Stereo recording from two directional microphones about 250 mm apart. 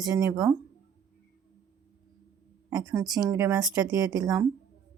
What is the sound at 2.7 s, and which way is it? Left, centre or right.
Speech, centre.